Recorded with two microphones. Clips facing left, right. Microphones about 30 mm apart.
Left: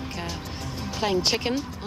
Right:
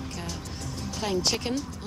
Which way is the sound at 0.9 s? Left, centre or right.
Left.